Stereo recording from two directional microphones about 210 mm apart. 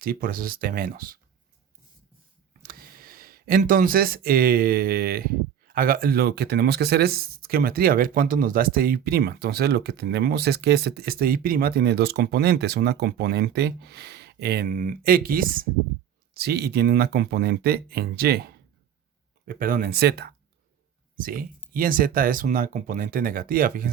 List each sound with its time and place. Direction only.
0.0 s speech: 45° right (ahead or behind)
2.5 s speech: 45° right (ahead or behind)